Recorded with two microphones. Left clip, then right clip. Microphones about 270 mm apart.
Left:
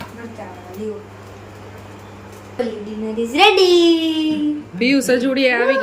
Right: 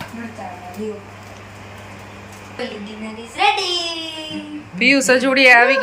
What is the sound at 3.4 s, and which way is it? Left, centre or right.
Speech, left.